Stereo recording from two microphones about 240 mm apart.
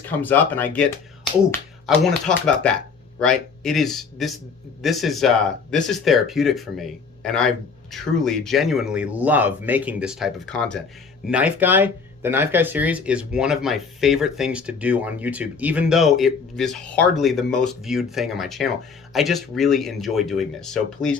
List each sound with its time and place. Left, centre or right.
0.2 s speech: centre